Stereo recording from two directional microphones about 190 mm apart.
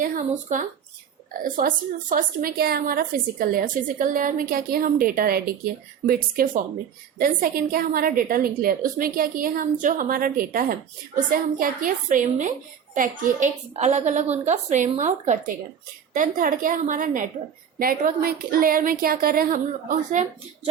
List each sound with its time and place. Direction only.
0.0 s a woman's voice: 40° right (ahead or behind)